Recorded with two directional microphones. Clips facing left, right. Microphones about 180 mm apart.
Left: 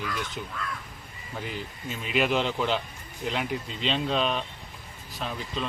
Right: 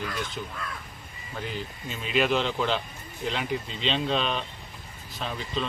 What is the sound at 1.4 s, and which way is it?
A man's voice, 5° left (ahead or behind).